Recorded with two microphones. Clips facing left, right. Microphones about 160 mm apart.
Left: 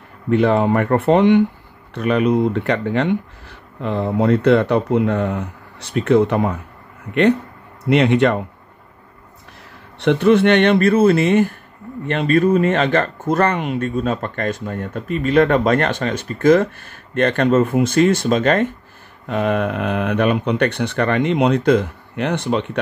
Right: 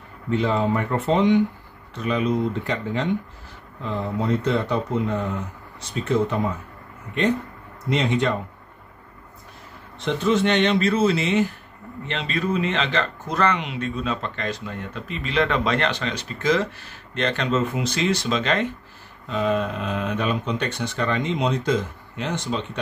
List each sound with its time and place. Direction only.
0.3 s speech: 60° left (ahead or behind)
7.9 s speech: 65° left (ahead or behind)
9.9 s speech: 65° left (ahead or behind)
19.2 s speech: 60° left (ahead or behind)